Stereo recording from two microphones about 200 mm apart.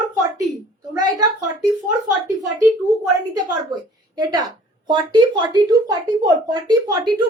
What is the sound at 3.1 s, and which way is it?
Speech, 20° right (ahead or behind).